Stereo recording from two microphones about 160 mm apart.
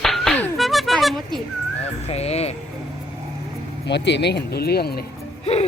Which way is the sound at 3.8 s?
90° left.